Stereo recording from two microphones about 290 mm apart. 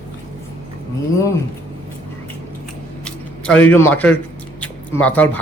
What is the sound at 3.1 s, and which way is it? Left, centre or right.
Speech, centre.